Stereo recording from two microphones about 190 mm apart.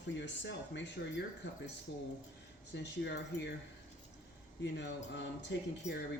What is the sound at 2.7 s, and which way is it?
Speech, 65° left (ahead or behind).